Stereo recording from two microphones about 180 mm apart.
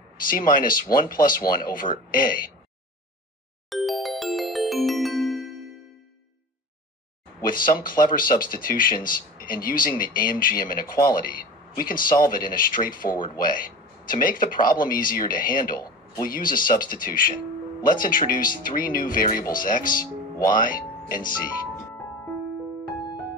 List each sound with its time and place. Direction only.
0.3 s speech: 50° left (ahead or behind)
3.7 s music: centre (ahead or behind)
7.4 s speech: 50° left (ahead or behind)